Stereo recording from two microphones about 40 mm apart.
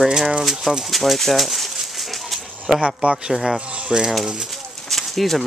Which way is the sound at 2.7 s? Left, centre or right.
Centre.